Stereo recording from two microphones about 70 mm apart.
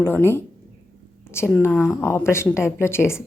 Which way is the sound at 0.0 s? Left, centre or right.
Left.